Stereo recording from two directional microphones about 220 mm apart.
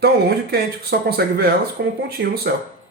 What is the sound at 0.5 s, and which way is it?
Speech, 45° right (ahead or behind).